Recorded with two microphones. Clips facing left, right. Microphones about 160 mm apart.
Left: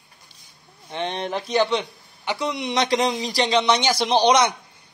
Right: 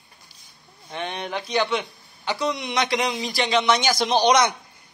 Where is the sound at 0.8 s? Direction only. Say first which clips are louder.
Left 3 dB; 25° left (ahead or behind).